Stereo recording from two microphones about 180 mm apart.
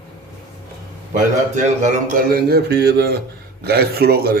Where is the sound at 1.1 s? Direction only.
40° right (ahead or behind).